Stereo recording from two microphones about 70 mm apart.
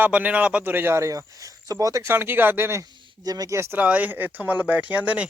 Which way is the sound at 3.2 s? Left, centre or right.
Right.